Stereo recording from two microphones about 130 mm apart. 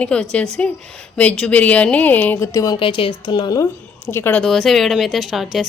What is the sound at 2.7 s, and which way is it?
Speech, 40° left (ahead or behind).